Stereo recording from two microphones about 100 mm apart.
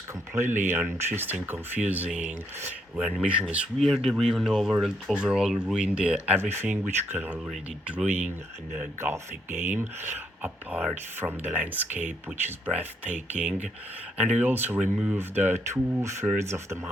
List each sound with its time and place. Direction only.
0.3 s speech: 20° right (ahead or behind)
3.8 s speech: 5° left (ahead or behind); by 6.3 s 15° right (ahead or behind)
6.3 s speech: 25° right (ahead or behind)